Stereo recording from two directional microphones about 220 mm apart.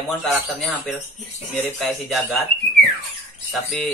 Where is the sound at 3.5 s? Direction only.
Centre (ahead or behind).